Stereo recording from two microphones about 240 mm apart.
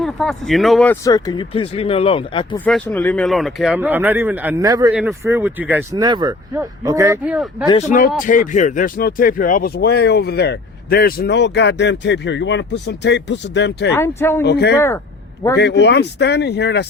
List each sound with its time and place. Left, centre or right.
0.0 s speech: centre
1.0 s speech: centre
2.6 s speech: centre
7.7 s speech: left
13.9 s speech: centre
14.4 s speech: left
14.8 s speech: centre
15.8 s speech: left